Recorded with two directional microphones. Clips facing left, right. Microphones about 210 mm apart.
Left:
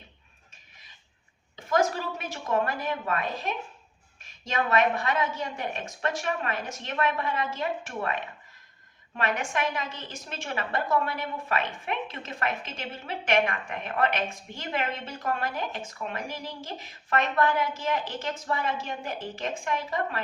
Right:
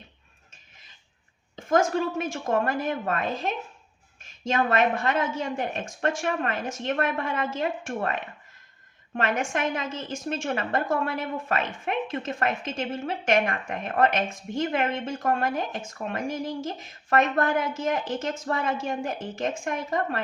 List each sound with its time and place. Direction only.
1.5 s a woman's voice: 45° right (ahead or behind)
4.5 s a woman's voice: 45° right (ahead or behind)
9.1 s a woman's voice: 45° right (ahead or behind)